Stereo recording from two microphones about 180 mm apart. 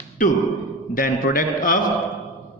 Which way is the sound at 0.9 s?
50° left (ahead or behind).